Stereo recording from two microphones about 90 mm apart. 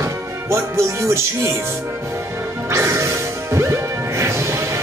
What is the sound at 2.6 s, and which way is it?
Music, 30° right (ahead or behind).